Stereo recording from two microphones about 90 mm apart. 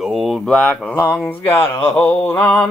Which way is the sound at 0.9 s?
25° left (ahead or behind).